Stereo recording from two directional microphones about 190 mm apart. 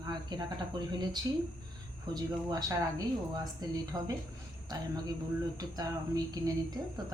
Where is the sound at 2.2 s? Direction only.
15° right (ahead or behind).